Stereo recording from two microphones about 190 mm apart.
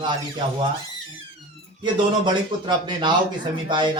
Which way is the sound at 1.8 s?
25° right (ahead or behind).